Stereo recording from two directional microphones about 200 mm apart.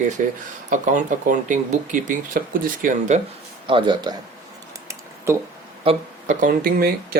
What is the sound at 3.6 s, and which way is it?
Speech, 25° right (ahead or behind).